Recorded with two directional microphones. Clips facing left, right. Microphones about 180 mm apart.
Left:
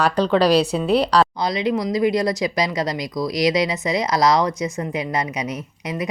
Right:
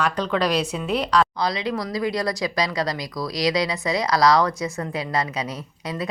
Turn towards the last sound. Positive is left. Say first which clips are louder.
# left 3 dB
turn(degrees=20)  # may be behind; listen again after turning